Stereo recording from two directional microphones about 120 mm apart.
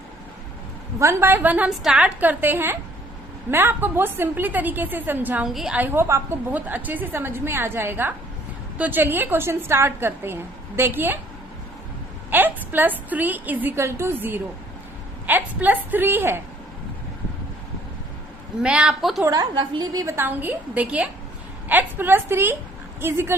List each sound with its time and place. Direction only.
0.9 s a woman's voice: 20° right (ahead or behind)
5.5 s a woman's voice: centre (ahead or behind)
5.7 s a woman's voice: 15° right (ahead or behind)
12.3 s a woman's voice: 15° right (ahead or behind)
18.6 s a woman's voice: 10° right (ahead or behind)
19.2 s a woman's voice: 35° right (ahead or behind)
20.1 s a woman's voice: 15° right (ahead or behind)